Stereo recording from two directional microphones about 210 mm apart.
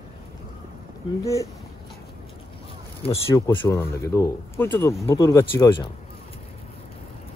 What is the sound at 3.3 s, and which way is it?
Speech, 15° left (ahead or behind).